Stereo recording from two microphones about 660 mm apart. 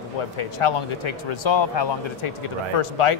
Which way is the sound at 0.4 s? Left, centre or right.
Left.